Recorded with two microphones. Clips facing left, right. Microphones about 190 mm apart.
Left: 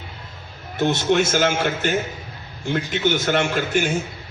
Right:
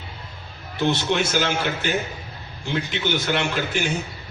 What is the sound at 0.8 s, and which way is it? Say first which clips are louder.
A man's voice: left 3 dB; 45° left (ahead or behind).